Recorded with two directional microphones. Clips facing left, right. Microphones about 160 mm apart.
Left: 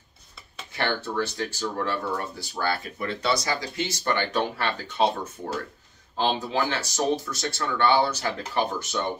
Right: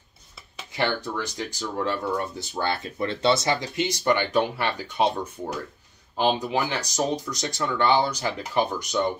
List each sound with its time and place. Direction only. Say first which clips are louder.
0.7 s speech: even; 15° right (ahead or behind)
6.1 s speech: right 2 dB; 15° right (ahead or behind)